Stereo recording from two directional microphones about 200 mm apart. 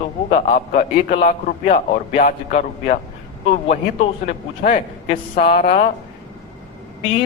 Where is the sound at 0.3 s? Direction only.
30° left (ahead or behind).